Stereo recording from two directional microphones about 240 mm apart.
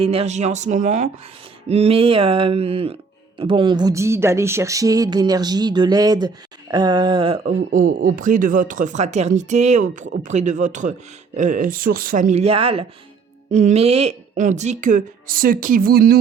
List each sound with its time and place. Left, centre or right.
0.0 s speech: right
7.4 s speech: right